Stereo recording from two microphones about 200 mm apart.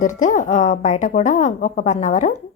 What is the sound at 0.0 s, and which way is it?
A woman's voice, 40° left (ahead or behind).